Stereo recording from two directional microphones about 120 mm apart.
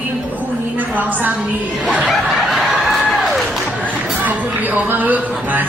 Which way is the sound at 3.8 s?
10° right (ahead or behind).